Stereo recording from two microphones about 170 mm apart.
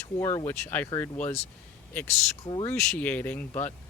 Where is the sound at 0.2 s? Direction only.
15° left (ahead or behind).